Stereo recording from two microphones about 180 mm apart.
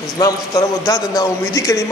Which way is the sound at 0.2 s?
20° left (ahead or behind).